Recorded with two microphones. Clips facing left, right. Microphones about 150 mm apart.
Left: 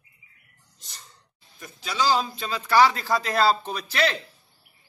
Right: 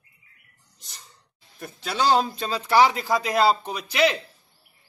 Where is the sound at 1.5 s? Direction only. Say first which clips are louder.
Right 1 dB; 60° right (ahead or behind).